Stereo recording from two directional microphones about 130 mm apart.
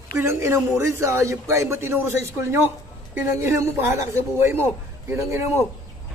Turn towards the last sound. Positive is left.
turn(degrees=-20)  # may be behind; listen again after turning